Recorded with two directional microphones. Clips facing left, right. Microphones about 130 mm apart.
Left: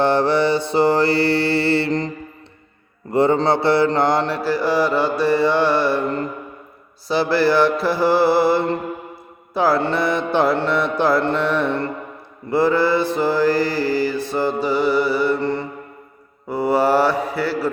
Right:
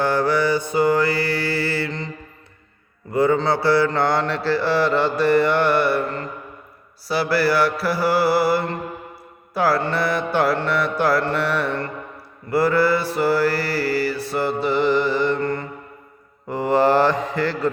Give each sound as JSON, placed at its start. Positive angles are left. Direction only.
{"t": 0.0, "sound": "mantra", "side_deg": 25}
{"t": 3.1, "sound": "mantra", "side_deg": 30}
{"t": 7.1, "sound": "mantra", "side_deg": 20}